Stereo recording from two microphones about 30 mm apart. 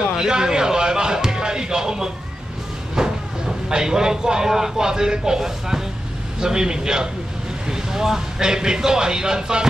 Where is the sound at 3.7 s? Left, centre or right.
Right.